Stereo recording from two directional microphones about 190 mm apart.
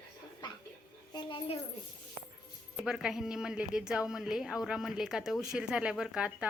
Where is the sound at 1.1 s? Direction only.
25° left (ahead or behind).